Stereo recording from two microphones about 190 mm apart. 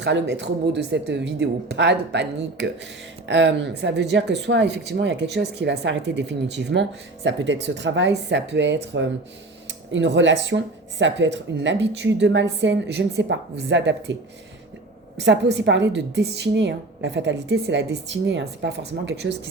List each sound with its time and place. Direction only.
0.0 s a woman's voice: 65° right (ahead or behind)
15.2 s a woman's voice: 70° right (ahead or behind)